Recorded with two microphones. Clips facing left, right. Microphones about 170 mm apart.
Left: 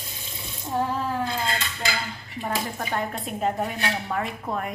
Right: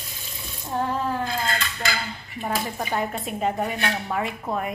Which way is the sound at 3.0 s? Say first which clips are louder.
Right 1 dB; 5° right (ahead or behind).